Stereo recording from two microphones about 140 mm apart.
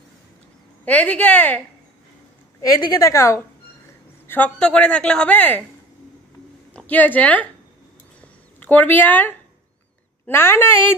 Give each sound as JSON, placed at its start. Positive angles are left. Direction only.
{"t": 0.8, "sound": "a woman's voice", "side_deg": 10}
{"t": 2.6, "sound": "a woman's voice", "side_deg": 30}
{"t": 4.3, "sound": "a woman's voice", "side_deg": 10}
{"t": 6.7, "sound": "speech", "side_deg": 10}
{"t": 8.5, "sound": "a woman's voice", "side_deg": 15}